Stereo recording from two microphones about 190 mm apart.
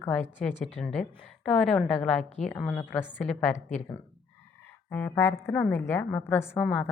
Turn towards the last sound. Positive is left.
turn(degrees=5)  # may be behind; listen again after turning